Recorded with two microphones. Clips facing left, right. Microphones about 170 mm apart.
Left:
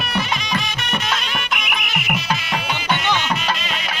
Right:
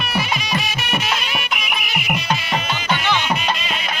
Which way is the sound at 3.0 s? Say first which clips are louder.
Right 1 dB; 5° right (ahead or behind).